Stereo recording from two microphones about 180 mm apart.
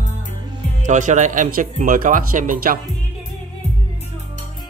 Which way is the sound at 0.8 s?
45° right (ahead or behind).